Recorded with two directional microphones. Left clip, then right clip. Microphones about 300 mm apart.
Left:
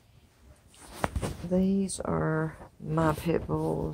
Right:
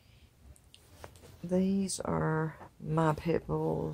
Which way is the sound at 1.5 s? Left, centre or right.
Centre.